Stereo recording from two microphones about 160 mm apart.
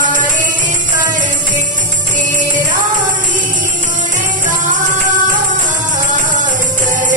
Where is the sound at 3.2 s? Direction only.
55° right (ahead or behind).